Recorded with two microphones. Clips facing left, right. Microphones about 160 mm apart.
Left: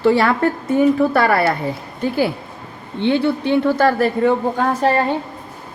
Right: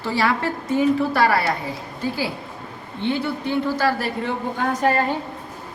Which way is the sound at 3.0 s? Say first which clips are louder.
Left 7 dB; 75° left (ahead or behind).